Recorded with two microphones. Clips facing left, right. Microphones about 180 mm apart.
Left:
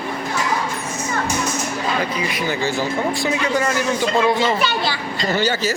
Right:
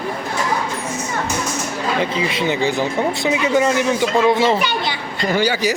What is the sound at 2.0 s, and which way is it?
A child's voice, 25° right (ahead or behind).